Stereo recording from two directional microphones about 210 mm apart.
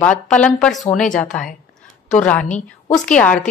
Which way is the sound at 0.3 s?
5° left (ahead or behind).